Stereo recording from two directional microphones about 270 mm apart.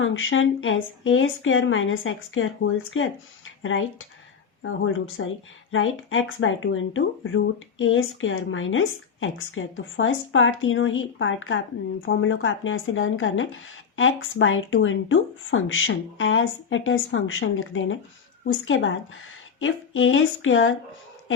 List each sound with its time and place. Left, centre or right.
0.0 s speech: left